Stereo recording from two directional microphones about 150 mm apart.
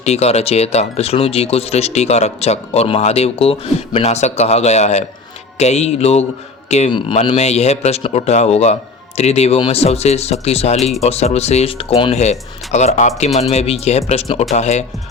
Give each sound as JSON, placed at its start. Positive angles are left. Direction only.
{"t": 0.0, "sound": "speech", "side_deg": 45}
{"t": 12.1, "sound": "speech", "side_deg": 50}